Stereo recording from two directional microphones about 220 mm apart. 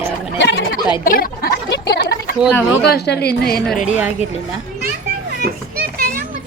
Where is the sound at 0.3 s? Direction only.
50° left (ahead or behind).